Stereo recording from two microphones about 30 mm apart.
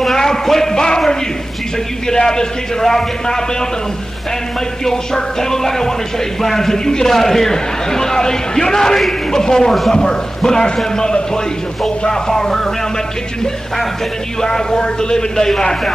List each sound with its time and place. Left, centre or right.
0.5 s a sound: centre
2.0 s a man's voice: centre
4.8 s a man's voice: centre
14.4 s a man's voice: left